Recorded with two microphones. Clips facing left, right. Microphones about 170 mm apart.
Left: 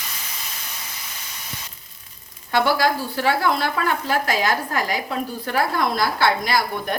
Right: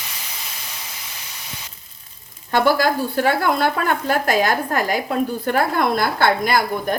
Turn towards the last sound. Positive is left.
turn(degrees=-50)  # may be behind; listen again after turning